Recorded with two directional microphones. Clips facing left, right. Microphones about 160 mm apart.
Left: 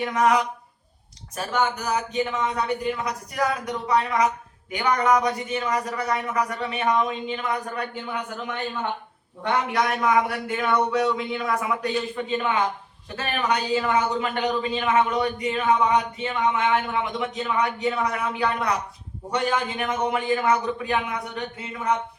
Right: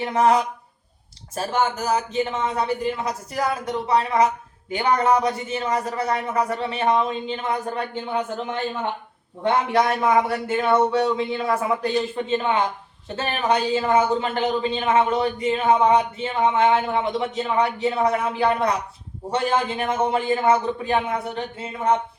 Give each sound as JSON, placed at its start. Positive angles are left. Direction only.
{"t": 0.0, "sound": "speech", "side_deg": -30}